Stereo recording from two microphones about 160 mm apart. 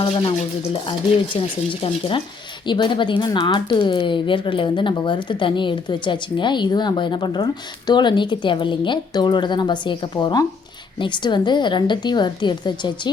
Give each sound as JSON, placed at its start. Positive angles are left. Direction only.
{"t": 0.0, "sound": "stir", "side_deg": 35}
{"t": 2.6, "sound": "a woman's voice", "side_deg": 30}